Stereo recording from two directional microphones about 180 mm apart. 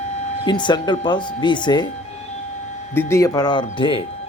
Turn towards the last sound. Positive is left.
turn(degrees=30)  # may be behind; listen again after turning